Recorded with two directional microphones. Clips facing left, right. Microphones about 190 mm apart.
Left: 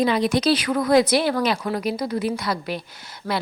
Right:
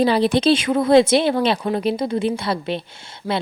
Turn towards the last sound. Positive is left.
turn(degrees=-25)  # may be behind; listen again after turning